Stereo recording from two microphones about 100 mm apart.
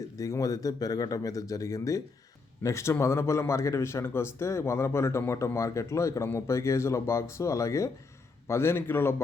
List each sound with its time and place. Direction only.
0.0 s speech: 35° left (ahead or behind)